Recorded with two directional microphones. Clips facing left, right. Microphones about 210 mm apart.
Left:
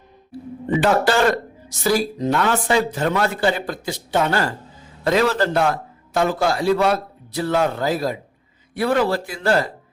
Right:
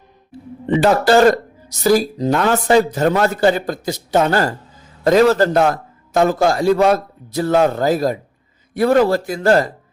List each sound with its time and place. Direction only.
0.3 s a man's voice: 35° right (ahead or behind)